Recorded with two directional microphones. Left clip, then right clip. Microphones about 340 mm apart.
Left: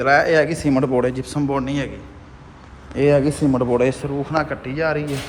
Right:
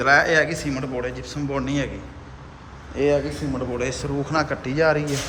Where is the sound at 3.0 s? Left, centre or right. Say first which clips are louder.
Left 4 dB; left.